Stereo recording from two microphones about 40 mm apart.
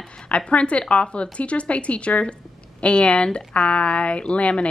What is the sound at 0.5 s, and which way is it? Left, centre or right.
A woman's voice, left.